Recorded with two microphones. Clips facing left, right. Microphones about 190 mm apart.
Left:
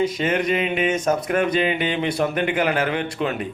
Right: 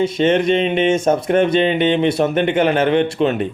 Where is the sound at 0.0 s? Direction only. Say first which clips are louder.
Right 6 dB; 25° right (ahead or behind).